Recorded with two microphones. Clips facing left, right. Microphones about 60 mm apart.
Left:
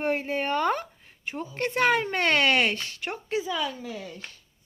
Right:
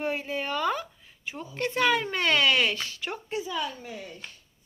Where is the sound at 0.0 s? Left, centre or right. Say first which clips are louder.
Left 3 dB; left.